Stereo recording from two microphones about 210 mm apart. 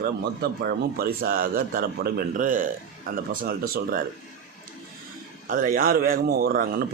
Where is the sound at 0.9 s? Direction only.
45° right (ahead or behind).